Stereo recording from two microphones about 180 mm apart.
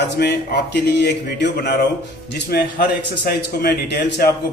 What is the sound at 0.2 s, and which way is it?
A man's voice, 65° left (ahead or behind).